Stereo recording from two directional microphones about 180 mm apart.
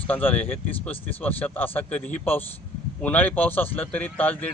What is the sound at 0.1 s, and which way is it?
Speech, 10° left (ahead or behind).